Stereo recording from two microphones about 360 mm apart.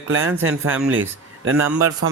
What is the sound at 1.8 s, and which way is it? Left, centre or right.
Speech, right.